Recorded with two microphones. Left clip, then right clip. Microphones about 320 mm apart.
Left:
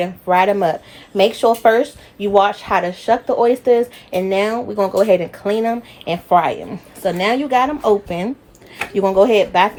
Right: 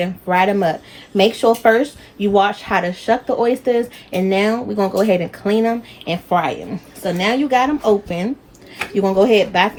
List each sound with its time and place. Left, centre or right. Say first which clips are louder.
0.0 s speech: left 1 dB; centre